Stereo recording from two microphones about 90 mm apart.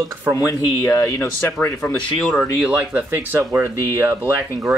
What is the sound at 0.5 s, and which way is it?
Speech, 30° left (ahead or behind).